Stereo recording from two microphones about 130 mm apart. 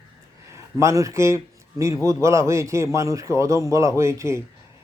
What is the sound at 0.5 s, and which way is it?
Speech, 20° right (ahead or behind).